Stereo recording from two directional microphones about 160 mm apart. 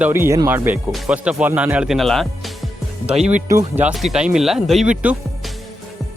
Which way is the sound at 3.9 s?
Centre (ahead or behind).